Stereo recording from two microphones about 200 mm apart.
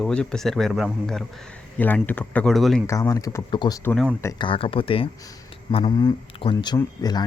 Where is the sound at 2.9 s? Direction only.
15° left (ahead or behind).